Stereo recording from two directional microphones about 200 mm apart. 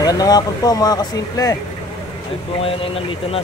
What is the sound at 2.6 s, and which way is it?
Speech, 25° left (ahead or behind).